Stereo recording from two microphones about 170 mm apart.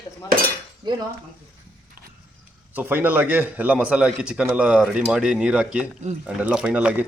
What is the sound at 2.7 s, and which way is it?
Speech, 10° right (ahead or behind).